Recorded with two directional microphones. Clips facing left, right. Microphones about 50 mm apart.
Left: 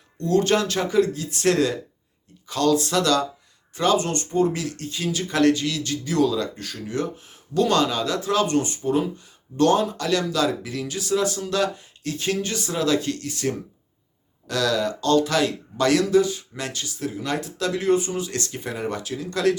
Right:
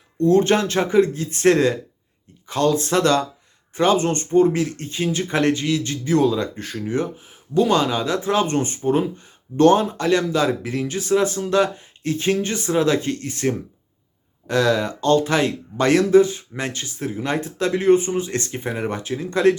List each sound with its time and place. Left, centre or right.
0.2 s speech: right
7.3 s speech: centre